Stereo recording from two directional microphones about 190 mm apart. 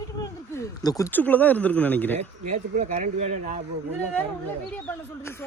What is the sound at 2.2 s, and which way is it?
Speech, 40° right (ahead or behind).